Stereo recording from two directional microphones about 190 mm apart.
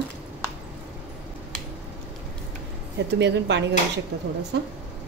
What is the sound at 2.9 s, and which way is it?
Speech, 65° right (ahead or behind).